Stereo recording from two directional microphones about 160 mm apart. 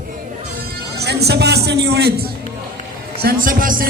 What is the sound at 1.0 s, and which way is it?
Speech, 90° right.